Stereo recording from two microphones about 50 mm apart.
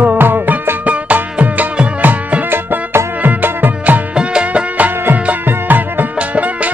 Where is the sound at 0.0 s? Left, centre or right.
Right.